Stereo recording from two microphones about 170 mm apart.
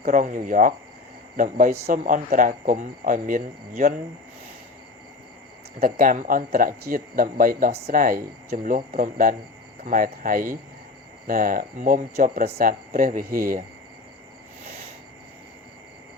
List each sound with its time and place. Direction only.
0.0 s speech: 50° right (ahead or behind)
5.8 s speech: 55° right (ahead or behind)